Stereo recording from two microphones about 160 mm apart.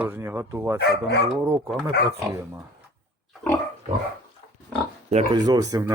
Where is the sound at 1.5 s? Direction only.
15° right (ahead or behind).